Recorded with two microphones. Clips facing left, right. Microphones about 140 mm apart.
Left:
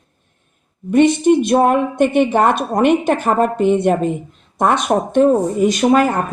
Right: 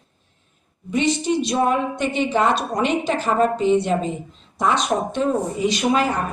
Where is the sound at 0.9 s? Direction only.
55° left (ahead or behind).